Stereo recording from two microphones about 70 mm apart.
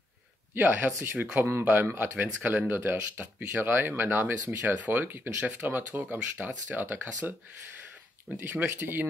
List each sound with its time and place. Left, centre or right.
0.6 s speech: right
1.4 s speech: right
8.4 s speech: right